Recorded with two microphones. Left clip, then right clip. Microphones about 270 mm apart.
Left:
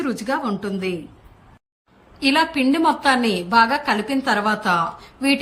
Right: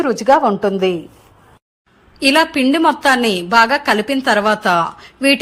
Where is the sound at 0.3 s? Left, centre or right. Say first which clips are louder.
Right 15 dB; right.